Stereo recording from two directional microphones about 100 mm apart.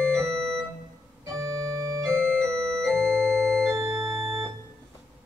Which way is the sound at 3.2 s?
25° right (ahead or behind).